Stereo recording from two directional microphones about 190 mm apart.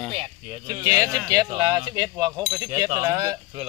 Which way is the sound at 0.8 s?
20° right (ahead or behind).